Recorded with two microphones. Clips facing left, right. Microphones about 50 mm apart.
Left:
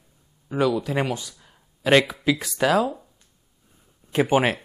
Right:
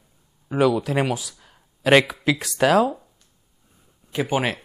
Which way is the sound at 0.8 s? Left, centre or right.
Centre.